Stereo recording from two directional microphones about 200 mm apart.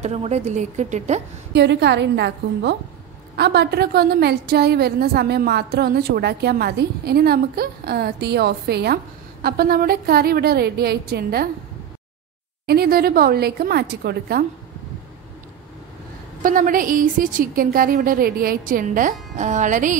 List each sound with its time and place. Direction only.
0.0 s a woman's voice: 35° right (ahead or behind)
1.5 s a woman's voice: 55° right (ahead or behind)
12.6 s a woman's voice: 50° right (ahead or behind)
16.4 s a woman's voice: 45° right (ahead or behind)